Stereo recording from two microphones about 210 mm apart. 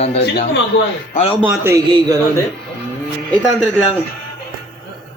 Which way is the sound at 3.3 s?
5° left (ahead or behind).